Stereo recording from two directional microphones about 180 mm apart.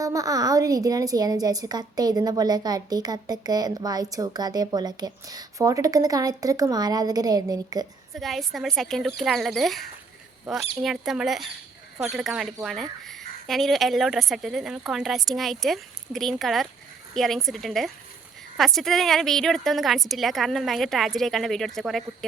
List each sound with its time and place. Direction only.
0.0 s a woman's voice: 20° right (ahead or behind)
8.1 s a woman's voice: centre (ahead or behind)